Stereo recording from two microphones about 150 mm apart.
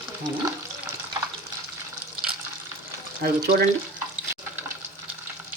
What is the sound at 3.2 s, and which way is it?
Speech, 90° right.